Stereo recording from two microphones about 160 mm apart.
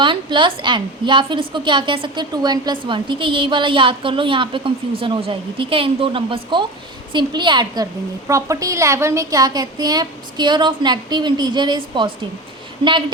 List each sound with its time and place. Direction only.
0.0 s a woman's voice: 30° right (ahead or behind)